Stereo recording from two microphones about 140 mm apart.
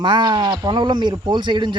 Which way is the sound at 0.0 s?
30° right (ahead or behind).